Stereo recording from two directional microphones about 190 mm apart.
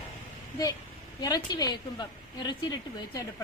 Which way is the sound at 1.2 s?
20° left (ahead or behind).